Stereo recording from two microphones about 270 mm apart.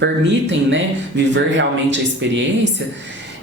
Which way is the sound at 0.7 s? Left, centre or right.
Right.